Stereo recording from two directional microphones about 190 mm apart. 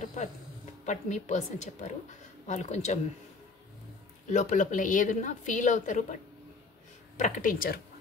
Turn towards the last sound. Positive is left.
turn(degrees=50)  # may be behind; listen again after turning